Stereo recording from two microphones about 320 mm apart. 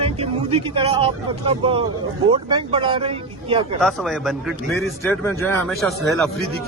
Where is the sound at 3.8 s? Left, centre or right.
Centre.